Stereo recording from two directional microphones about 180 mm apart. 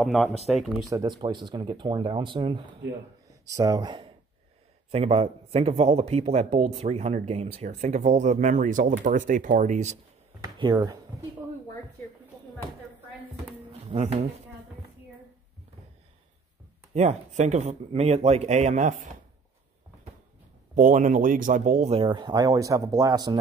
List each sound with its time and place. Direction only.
0.0 s speech: centre (ahead or behind)
0.8 s speech: 20° right (ahead or behind); by 9.9 s 40° right (ahead or behind)
10.6 s speech: 25° right (ahead or behind)
13.8 s speech: 40° right (ahead or behind)
16.9 s speech: 40° right (ahead or behind)
20.7 s speech: 45° right (ahead or behind); by 23.3 s 20° right (ahead or behind)